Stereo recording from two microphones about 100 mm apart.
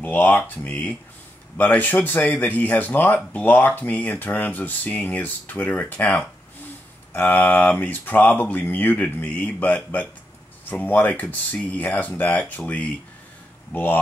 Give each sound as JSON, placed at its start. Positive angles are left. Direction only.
{"t": 0.0, "sound": "speech", "side_deg": 15}